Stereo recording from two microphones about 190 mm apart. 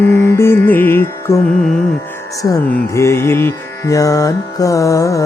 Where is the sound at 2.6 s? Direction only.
15° left (ahead or behind).